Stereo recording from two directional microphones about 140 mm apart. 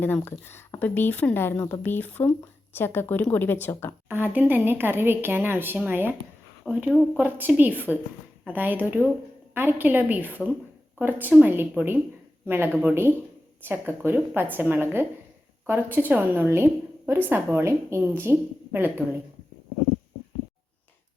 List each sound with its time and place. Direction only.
0.0 s speech: 15° left (ahead or behind)
4.1 s speech: 15° right (ahead or behind)